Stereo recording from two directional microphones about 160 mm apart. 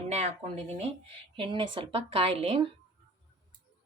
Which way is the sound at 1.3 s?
30° right (ahead or behind).